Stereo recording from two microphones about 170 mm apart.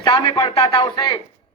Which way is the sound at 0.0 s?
25° left (ahead or behind).